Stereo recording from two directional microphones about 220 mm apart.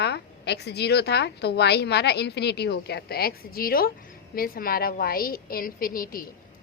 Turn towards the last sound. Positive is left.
turn(degrees=40)  # may be behind; listen again after turning